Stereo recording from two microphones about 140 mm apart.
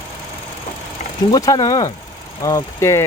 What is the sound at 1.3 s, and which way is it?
Speech, 25° left (ahead or behind).